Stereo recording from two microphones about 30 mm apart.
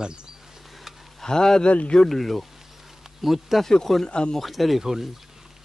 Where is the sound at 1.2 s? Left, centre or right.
Centre.